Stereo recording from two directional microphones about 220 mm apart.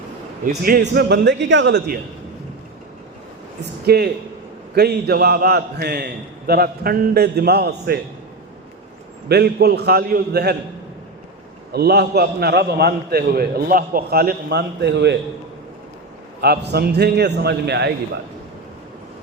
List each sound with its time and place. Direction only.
0.4 s a man's voice: 40° right (ahead or behind)
3.6 s a man's voice: 45° right (ahead or behind)
9.3 s a man's voice: 45° right (ahead or behind)
11.7 s a man's voice: 45° right (ahead or behind)
16.4 s a man's voice: 45° right (ahead or behind)